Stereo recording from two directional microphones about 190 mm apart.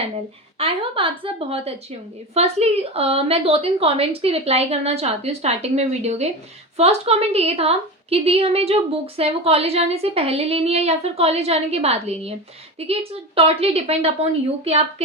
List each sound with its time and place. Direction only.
0.6 s a woman's voice: 25° right (ahead or behind)